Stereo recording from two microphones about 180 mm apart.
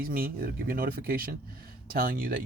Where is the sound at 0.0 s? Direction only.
55° right (ahead or behind).